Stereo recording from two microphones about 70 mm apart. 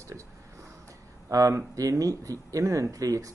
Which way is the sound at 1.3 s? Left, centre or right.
Right.